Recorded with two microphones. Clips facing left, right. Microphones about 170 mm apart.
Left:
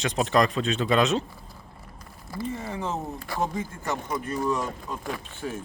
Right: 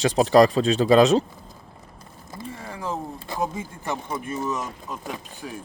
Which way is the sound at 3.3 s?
20° right (ahead or behind).